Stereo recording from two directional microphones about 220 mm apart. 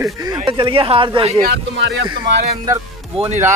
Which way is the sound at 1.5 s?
55° right (ahead or behind).